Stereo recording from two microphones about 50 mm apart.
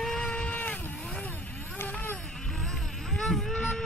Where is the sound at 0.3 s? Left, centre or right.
Left.